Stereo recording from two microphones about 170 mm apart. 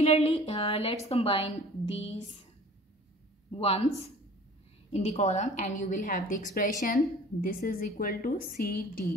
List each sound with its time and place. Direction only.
0.0 s a woman's voice: 35° left (ahead or behind)
3.5 s a woman's voice: 35° left (ahead or behind)
4.9 s a woman's voice: 40° left (ahead or behind); by 9.0 s 60° left (ahead or behind)